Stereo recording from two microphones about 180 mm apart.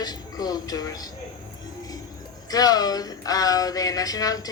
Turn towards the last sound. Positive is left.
turn(degrees=20)  # may be behind; listen again after turning